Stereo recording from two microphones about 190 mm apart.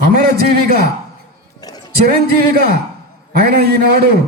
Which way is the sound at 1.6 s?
20° left (ahead or behind).